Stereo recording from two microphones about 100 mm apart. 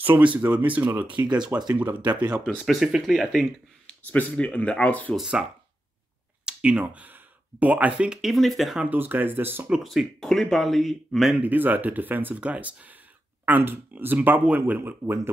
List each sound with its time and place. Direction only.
0.0 s speech: 20° right (ahead or behind)
2.4 s speech: centre (ahead or behind)
3.8 s speech: 15° left (ahead or behind)
5.1 s speech: 10° right (ahead or behind)
6.4 s speech: 10° right (ahead or behind)
8.8 s speech: 20° right (ahead or behind)
9.8 s speech: centre (ahead or behind)
11.3 s speech: 15° right (ahead or behind)